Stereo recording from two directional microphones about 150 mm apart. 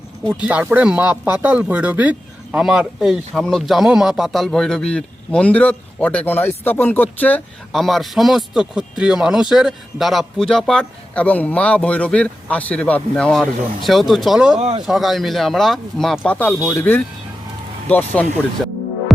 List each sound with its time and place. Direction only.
0.4 s speech: 10° right (ahead or behind)
14.6 s speech: 45° right (ahead or behind)
14.8 s speech: centre (ahead or behind); by 17.0 s 15° left (ahead or behind)
18.2 s music: centre (ahead or behind)